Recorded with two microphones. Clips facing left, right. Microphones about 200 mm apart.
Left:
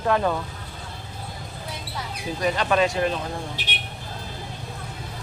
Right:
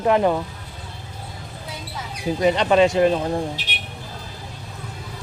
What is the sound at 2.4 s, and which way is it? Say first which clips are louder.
Speech: right 5 dB; 25° right (ahead or behind).